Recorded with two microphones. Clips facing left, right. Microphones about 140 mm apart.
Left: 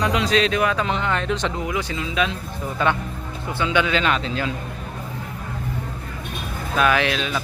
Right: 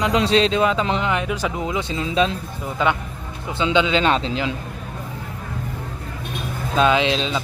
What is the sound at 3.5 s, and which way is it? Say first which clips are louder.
Speech: right 2 dB; 20° right (ahead or behind).